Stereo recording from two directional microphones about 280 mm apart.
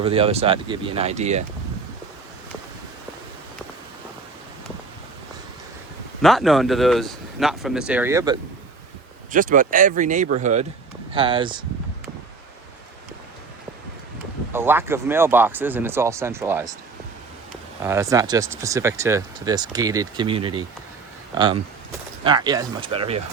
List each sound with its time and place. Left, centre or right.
0.0 s speech: centre
6.2 s speech: centre
9.3 s speech: right
14.5 s speech: centre
17.8 s speech: centre